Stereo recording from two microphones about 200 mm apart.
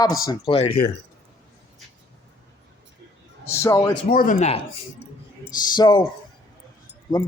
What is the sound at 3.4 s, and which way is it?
Speech, 15° left (ahead or behind).